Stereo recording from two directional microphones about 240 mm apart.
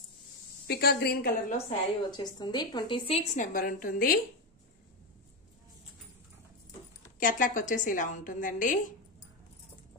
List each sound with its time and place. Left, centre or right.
0.7 s a woman's voice: left
1.7 s a woman's voice: centre
3.3 s a woman's voice: left
7.2 s a woman's voice: left